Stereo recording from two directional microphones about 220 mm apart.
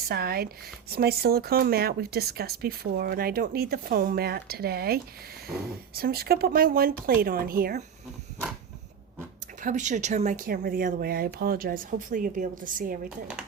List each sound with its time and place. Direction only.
0.1 s speech: 45° right (ahead or behind)
9.6 s speech: 35° right (ahead or behind)